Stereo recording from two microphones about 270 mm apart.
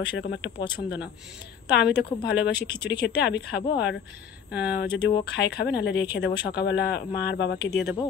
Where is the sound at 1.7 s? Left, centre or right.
Left.